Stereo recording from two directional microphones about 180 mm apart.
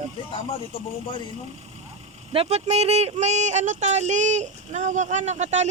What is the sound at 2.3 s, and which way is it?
Speech, 35° right (ahead or behind).